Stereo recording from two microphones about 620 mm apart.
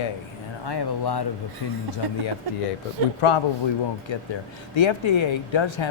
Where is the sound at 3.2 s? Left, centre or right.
Left.